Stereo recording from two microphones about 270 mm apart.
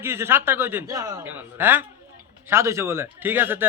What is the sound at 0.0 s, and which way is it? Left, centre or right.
A man's voice, centre.